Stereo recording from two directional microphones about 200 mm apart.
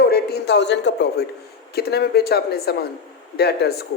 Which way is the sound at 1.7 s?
55° left (ahead or behind).